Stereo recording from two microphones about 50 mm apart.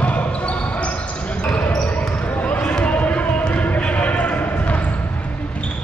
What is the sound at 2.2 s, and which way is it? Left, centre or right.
Basketball bounce, left.